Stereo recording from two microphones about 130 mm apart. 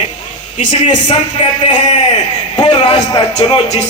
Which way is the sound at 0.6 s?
70° left (ahead or behind).